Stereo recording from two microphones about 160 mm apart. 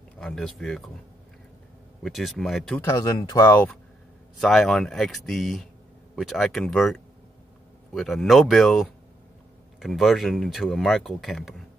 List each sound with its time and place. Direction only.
0.2 s speech: 5° left (ahead or behind)
2.0 s speech: centre (ahead or behind)
2.8 s speech: 20° left (ahead or behind)
4.4 s speech: centre (ahead or behind)